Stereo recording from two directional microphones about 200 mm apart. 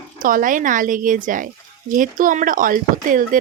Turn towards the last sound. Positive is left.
turn(degrees=-45)  # may be behind; listen again after turning